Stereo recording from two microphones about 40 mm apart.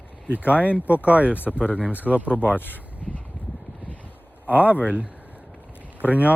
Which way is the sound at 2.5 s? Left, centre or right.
Left.